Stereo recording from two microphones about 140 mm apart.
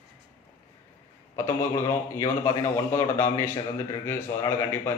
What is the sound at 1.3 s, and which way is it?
A man's voice, 20° left (ahead or behind).